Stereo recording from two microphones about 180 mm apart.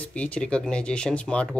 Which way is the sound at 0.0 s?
5° left (ahead or behind).